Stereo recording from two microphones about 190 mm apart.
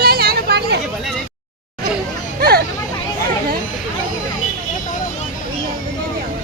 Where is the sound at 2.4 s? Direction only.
55° right (ahead or behind).